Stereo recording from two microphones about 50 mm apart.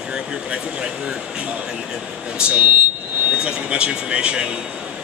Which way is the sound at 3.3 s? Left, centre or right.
Right.